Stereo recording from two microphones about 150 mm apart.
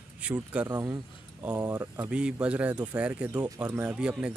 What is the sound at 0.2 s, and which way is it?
Speech, 10° right (ahead or behind).